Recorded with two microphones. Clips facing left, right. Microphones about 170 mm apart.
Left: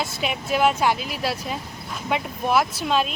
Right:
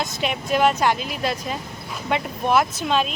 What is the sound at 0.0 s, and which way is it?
Speech, 5° left (ahead or behind).